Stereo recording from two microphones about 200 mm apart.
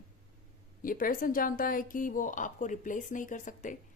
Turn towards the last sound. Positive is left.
turn(degrees=40)  # may be behind; listen again after turning